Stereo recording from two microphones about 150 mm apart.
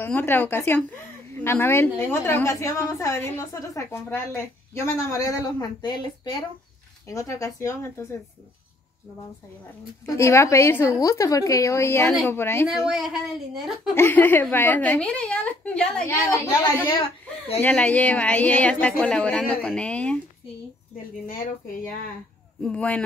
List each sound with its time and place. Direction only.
0.0 s a woman's voice: 15° left (ahead or behind)
10.0 s a woman's voice: 20° left (ahead or behind)
12.6 s a woman's voice: 5° right (ahead or behind)
13.9 s a woman's voice: 15° left (ahead or behind)
16.3 s a woman's voice: 20° left (ahead or behind)
17.6 s a woman's voice: 10° left (ahead or behind)
22.6 s a woman's voice: 5° left (ahead or behind)